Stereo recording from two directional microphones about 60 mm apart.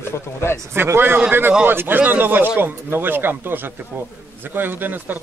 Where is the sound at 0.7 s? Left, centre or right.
Right.